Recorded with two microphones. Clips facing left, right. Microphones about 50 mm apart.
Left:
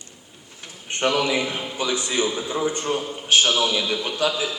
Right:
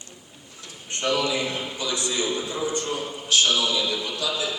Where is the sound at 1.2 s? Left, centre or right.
Left.